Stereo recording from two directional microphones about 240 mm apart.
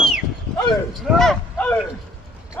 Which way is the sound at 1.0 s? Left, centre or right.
Centre.